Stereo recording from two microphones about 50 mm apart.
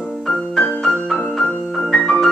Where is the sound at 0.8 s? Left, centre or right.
Centre.